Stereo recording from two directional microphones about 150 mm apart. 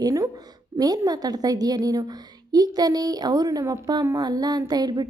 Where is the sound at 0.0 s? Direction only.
20° right (ahead or behind).